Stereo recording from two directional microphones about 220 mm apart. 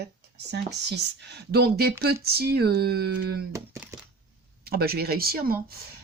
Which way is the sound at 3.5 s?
10° right (ahead or behind).